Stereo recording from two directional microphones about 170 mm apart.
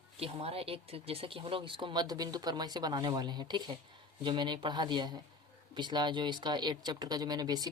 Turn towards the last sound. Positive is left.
turn(degrees=-25)  # may be behind; listen again after turning